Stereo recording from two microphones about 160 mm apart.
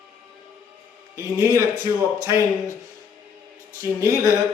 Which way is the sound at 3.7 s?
20° right (ahead or behind).